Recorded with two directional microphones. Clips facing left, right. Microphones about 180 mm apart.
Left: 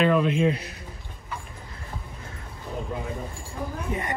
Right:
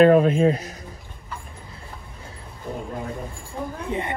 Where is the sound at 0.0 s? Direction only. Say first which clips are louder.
Right 6 dB; 45° right (ahead or behind).